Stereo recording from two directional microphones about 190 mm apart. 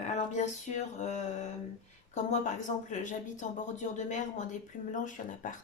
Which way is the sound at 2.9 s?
40° left (ahead or behind).